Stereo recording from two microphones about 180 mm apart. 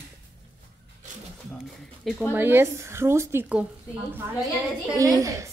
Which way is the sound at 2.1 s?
10° left (ahead or behind).